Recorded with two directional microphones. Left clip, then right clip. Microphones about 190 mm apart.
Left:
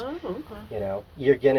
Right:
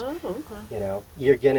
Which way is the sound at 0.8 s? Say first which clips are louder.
Right 1 dB; 40° right (ahead or behind).